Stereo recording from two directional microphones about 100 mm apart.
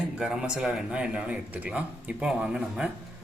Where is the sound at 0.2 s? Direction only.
10° right (ahead or behind).